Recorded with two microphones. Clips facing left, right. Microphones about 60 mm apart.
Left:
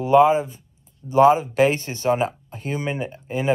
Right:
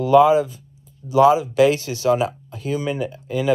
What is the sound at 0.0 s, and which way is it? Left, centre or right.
Speech, left.